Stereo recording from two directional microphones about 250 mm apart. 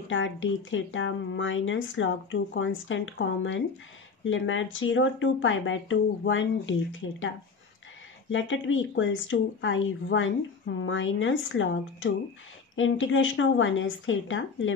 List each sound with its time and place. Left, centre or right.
0.1 s speech: left